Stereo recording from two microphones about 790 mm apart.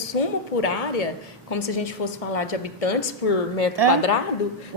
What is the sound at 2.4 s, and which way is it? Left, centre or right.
Speech, left.